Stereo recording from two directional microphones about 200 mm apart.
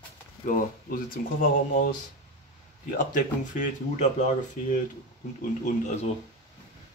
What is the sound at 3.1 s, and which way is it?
Speech, 40° left (ahead or behind).